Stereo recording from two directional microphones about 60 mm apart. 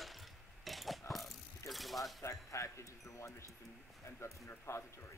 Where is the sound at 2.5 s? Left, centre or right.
Left.